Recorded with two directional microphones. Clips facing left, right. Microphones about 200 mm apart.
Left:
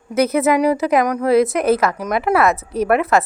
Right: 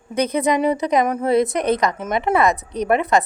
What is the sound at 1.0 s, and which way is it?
Speech, 25° right (ahead or behind).